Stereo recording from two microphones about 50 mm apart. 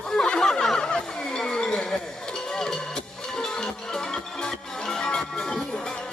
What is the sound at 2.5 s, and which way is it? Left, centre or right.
Music, centre.